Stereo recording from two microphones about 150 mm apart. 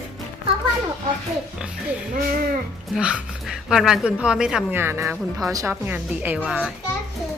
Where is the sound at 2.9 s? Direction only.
5° right (ahead or behind).